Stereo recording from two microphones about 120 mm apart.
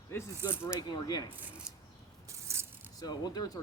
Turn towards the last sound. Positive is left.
turn(degrees=35)  # may be behind; listen again after turning